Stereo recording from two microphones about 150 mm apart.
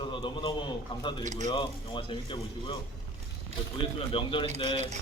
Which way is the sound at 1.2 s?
55° right (ahead or behind).